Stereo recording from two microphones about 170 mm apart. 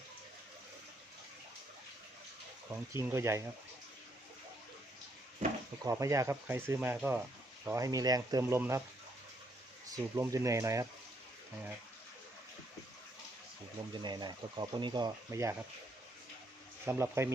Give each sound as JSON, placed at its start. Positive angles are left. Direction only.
{"t": 2.9, "sound": "speech", "side_deg": -15}
{"t": 5.8, "sound": "speech", "side_deg": -20}
{"t": 9.9, "sound": "speech", "side_deg": -20}
{"t": 13.9, "sound": "speech", "side_deg": -25}
{"t": 16.8, "sound": "speech", "side_deg": -15}